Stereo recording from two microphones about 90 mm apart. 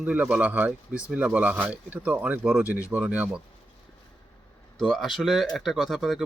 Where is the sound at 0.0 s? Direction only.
15° right (ahead or behind).